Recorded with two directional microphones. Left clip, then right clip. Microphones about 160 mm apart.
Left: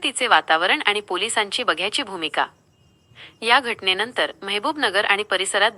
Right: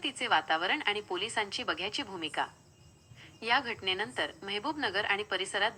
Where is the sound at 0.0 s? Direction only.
35° left (ahead or behind).